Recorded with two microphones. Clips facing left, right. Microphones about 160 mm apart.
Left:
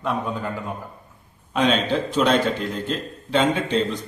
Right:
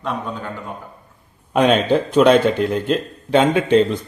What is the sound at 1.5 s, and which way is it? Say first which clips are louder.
A man's voice: right 5 dB; 55° right (ahead or behind).